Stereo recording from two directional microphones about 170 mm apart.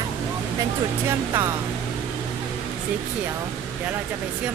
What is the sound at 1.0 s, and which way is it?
Speech, 15° right (ahead or behind).